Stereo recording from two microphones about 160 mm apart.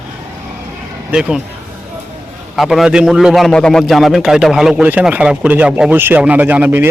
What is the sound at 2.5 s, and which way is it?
A man's voice, centre (ahead or behind).